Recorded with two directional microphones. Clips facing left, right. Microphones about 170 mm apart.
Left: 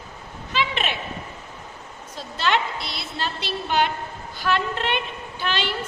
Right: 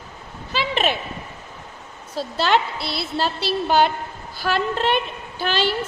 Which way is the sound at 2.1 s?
35° right (ahead or behind).